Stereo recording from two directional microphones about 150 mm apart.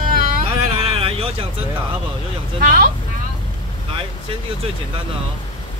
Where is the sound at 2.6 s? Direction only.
70° right (ahead or behind).